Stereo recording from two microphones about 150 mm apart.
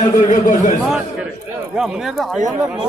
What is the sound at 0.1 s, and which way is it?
Speech, 70° left (ahead or behind).